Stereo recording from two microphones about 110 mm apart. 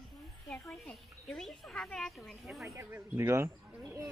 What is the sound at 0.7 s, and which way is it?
Speech, 5° left (ahead or behind).